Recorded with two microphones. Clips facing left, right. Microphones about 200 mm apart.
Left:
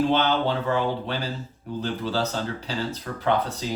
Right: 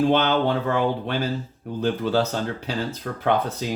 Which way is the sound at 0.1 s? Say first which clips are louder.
Right 3 dB; 55° right (ahead or behind).